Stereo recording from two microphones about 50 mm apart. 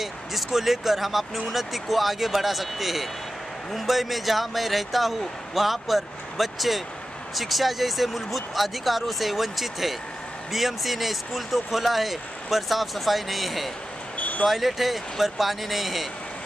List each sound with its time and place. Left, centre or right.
0.0 s speech: centre
14.1 s vehicle: left
14.4 s speech: centre